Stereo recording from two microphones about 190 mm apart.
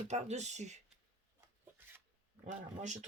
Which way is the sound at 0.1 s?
35° right (ahead or behind).